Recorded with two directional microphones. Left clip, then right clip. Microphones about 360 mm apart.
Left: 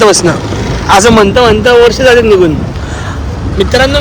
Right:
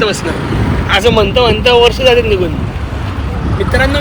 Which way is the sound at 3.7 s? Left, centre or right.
Centre.